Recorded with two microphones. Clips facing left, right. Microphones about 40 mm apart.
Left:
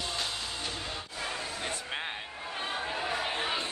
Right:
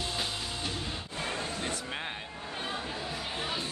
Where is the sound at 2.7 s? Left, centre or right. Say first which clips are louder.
Left 7 dB; left.